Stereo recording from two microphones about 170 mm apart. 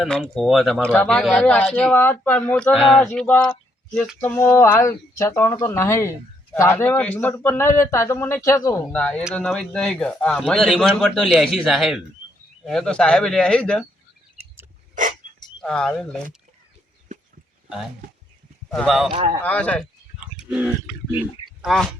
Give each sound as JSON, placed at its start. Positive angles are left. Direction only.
{"t": 0.0, "sound": "speech", "side_deg": 0}
{"t": 4.2, "sound": "speech", "side_deg": 10}
{"t": 15.2, "sound": "dog", "side_deg": -50}
{"t": 15.6, "sound": "speech", "side_deg": 5}
{"t": 18.7, "sound": "speech", "side_deg": 0}
{"t": 20.4, "sound": "speech", "side_deg": -5}